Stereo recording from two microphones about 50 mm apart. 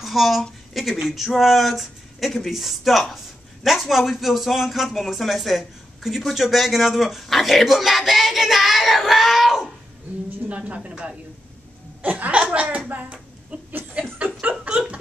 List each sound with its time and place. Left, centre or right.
0.0 s a sound: centre
1.0 s speech: centre
10.5 s a woman's voice: right
12.7 s hands: right
14.0 s chuckle: right